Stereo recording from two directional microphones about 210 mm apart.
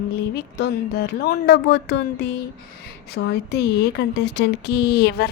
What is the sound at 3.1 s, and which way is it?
Speech, 50° left (ahead or behind).